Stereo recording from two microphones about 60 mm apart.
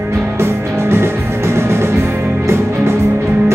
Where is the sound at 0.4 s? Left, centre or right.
Right.